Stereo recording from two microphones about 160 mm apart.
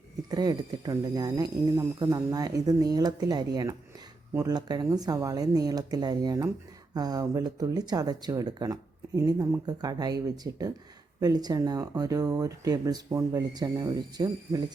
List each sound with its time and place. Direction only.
0.3 s speech: 25° right (ahead or behind)